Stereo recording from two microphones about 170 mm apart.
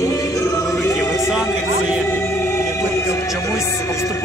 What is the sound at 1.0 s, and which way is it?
Music, 15° left (ahead or behind).